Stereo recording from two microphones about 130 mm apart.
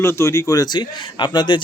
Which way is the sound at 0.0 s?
20° left (ahead or behind).